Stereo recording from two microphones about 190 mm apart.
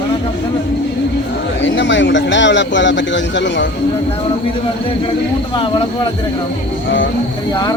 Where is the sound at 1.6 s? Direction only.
70° left (ahead or behind).